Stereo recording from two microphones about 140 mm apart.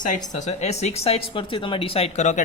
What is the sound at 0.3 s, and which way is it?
Speech, 55° left (ahead or behind).